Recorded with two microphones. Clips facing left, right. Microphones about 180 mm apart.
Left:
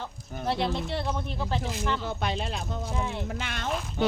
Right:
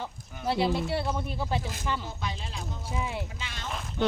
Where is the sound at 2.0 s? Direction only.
65° left (ahead or behind).